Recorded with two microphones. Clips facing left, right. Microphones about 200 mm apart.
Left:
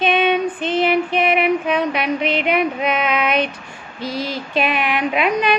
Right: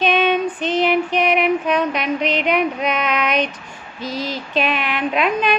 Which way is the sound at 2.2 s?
55° left (ahead or behind).